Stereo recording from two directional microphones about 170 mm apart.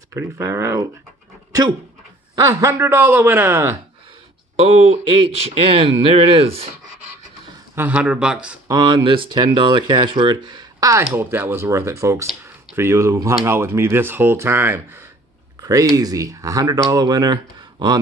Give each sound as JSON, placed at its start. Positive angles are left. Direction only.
{"t": 0.1, "sound": "a man's voice", "side_deg": -15}
{"t": 2.3, "sound": "a man's voice", "side_deg": -20}
{"t": 4.6, "sound": "speech", "side_deg": -35}
{"t": 7.7, "sound": "a man's voice", "side_deg": -10}
{"t": 8.6, "sound": "a man's voice", "side_deg": -25}